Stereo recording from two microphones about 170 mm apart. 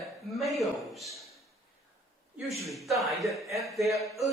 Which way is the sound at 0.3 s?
Centre (ahead or behind).